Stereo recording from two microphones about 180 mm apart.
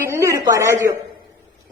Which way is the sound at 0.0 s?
15° right (ahead or behind).